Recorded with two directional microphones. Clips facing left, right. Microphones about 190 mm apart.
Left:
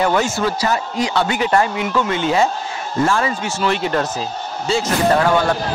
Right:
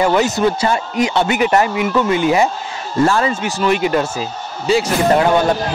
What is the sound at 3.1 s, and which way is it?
Speech, 35° right (ahead or behind).